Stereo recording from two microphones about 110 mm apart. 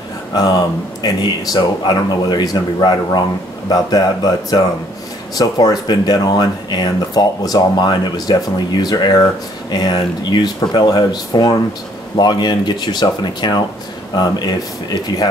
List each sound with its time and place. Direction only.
0.3 s speech: 35° left (ahead or behind)